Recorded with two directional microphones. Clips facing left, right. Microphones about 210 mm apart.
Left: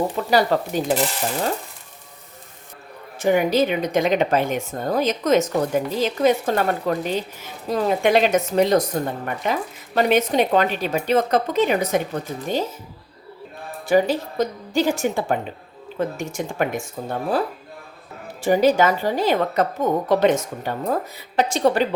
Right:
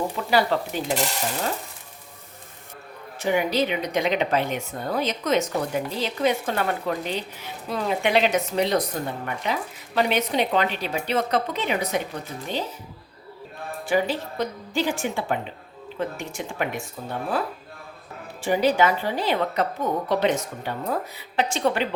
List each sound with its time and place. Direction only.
0.3 s speech: 45° left (ahead or behind)
3.2 s speech: 45° left (ahead or behind)
13.8 s speech: 45° left (ahead or behind)
18.4 s a woman's voice: 45° left (ahead or behind)